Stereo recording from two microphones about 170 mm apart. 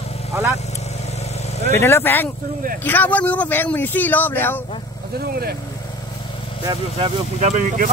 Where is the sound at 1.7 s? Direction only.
15° left (ahead or behind).